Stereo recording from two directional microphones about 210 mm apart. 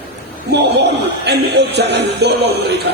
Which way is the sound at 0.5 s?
55° right (ahead or behind).